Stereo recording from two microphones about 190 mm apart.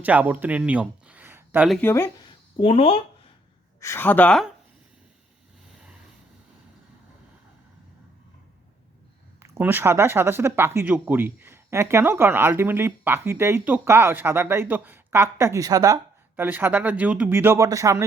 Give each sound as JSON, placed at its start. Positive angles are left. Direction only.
{"t": 0.0, "sound": "speech", "side_deg": -10}
{"t": 1.8, "sound": "speech", "side_deg": 10}
{"t": 2.6, "sound": "speech", "side_deg": 30}
{"t": 3.8, "sound": "speech", "side_deg": 15}
{"t": 9.4, "sound": "speech", "side_deg": -10}